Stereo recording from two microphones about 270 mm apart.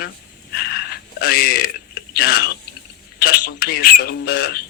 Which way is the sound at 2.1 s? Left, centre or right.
Left.